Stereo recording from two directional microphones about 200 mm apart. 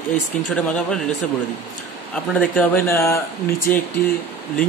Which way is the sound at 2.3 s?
10° left (ahead or behind).